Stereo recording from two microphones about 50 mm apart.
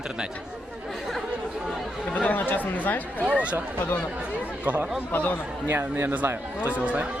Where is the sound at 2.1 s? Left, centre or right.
Left.